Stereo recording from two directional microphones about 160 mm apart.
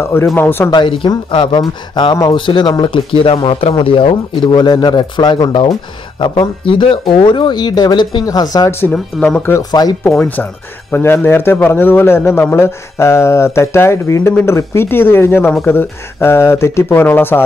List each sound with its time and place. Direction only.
0.0 s speech: 15° left (ahead or behind)
0.7 s speech: 30° left (ahead or behind)
8.9 s speech: centre (ahead or behind)
9.5 s speech: 25° left (ahead or behind)
10.1 s speech: 10° left (ahead or behind)